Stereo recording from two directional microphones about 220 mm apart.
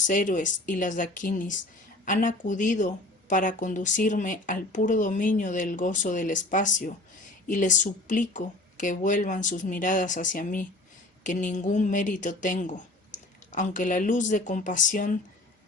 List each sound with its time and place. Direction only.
0.1 s speech: 35° left (ahead or behind)